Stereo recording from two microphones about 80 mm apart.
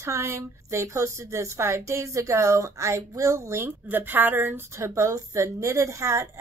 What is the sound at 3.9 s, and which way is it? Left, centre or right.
Speech, right.